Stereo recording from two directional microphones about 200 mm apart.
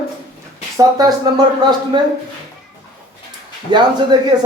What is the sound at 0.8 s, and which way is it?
Speech, 20° right (ahead or behind).